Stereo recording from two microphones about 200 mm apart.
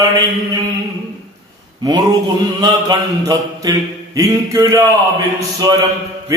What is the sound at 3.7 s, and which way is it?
Speech, 20° right (ahead or behind).